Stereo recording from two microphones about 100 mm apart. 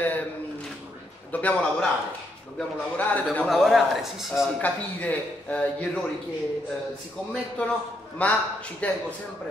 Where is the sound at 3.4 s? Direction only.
Centre (ahead or behind).